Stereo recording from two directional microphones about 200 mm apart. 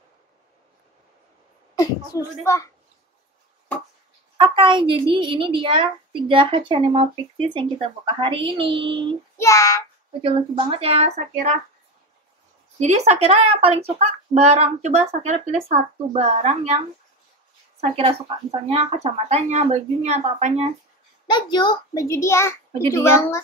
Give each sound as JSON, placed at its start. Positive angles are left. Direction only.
{"t": 1.8, "sound": "a child's voice", "side_deg": 15}
{"t": 4.4, "sound": "a woman's voice", "side_deg": -25}
{"t": 9.4, "sound": "child singing", "side_deg": 15}
{"t": 10.2, "sound": "speech", "side_deg": -30}
{"t": 12.7, "sound": "speech", "side_deg": -35}
{"t": 21.3, "sound": "a child's voice", "side_deg": 25}